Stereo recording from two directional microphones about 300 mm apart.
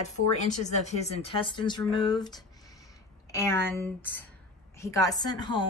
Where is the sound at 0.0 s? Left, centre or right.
Left.